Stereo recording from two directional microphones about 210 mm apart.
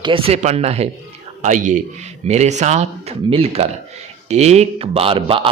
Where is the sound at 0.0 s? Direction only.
25° right (ahead or behind).